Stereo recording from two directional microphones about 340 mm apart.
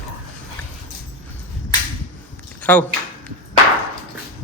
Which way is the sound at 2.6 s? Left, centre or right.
Centre.